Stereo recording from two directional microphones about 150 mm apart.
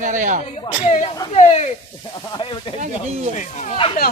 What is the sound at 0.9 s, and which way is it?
Speech, 50° left (ahead or behind).